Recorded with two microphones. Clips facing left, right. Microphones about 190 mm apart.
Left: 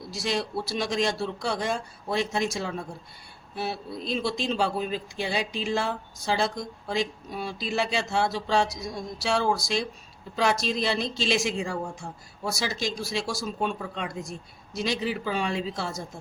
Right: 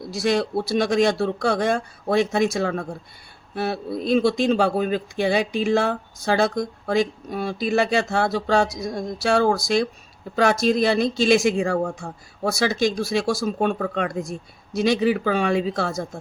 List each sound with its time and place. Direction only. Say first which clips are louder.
0.1 s speech: right 8 dB; 55° right (ahead or behind)